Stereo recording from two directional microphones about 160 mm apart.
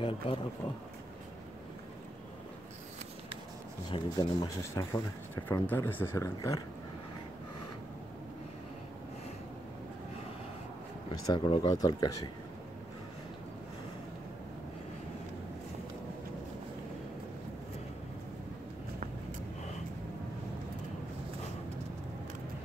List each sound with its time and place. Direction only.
0.0 s speech: 30° left (ahead or behind)
3.9 s speech: 30° left (ahead or behind)
5.3 s speech: 15° left (ahead or behind)
11.2 s speech: 30° left (ahead or behind)